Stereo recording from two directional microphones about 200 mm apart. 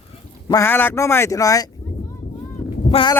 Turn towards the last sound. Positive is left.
turn(degrees=25)  # may be behind; listen again after turning